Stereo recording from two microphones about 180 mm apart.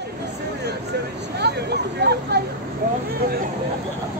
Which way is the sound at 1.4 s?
65° right (ahead or behind).